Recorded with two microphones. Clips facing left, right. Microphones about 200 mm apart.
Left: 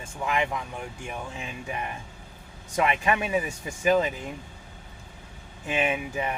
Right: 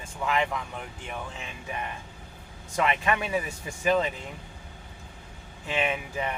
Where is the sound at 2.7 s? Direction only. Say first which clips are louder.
Left 2 dB; 20° left (ahead or behind).